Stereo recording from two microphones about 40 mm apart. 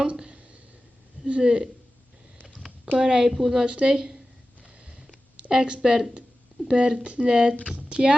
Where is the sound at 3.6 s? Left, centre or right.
Right.